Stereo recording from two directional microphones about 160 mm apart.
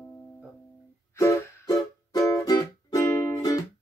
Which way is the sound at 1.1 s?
20° left (ahead or behind).